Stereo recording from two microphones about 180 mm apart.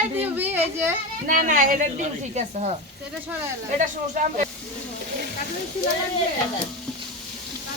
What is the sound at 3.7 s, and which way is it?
Speech, 45° right (ahead or behind).